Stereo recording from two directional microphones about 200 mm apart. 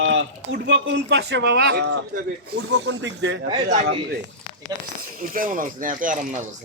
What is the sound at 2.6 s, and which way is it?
Speech, 65° right (ahead or behind).